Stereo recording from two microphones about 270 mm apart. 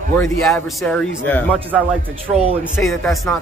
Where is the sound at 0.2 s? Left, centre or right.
Centre.